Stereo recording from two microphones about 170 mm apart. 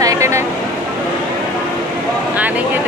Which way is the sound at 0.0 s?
20° right (ahead or behind).